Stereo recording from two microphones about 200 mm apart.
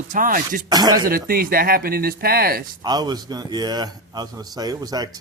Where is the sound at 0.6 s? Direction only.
20° right (ahead or behind).